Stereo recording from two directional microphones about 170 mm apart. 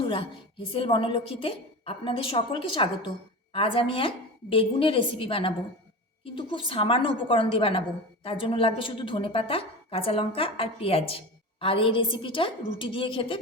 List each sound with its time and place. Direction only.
0.1 s a woman's voice: 30° left (ahead or behind)